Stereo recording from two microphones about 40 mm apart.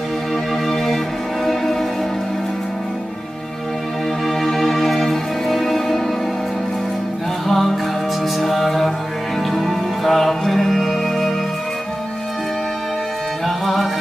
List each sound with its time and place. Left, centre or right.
4.4 s music: centre
7.4 s music: centre